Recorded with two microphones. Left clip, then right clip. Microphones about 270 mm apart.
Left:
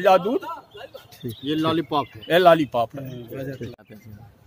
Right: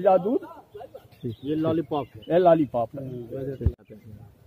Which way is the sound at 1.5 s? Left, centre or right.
Left.